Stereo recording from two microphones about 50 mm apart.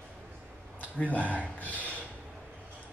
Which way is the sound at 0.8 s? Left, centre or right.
Left.